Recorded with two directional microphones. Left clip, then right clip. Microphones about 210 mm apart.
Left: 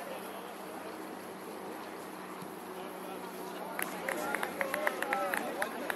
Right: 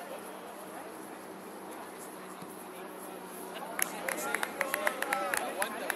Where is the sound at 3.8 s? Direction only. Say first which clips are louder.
Right 1 dB; 30° right (ahead or behind).